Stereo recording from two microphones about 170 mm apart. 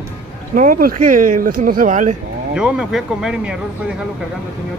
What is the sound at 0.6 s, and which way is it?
Speech, 55° right (ahead or behind).